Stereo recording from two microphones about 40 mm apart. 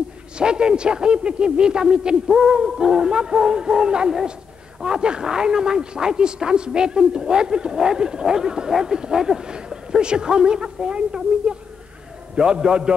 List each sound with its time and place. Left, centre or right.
0.4 s speech: right
2.2 s a sound: centre
4.7 s speech: centre
7.7 s a sound: centre
9.0 s speech: centre
12.4 s speech: centre